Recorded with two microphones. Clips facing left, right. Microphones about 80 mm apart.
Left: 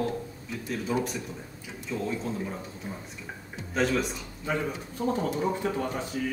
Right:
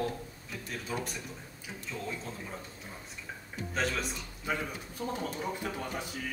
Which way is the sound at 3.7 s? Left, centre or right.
Centre.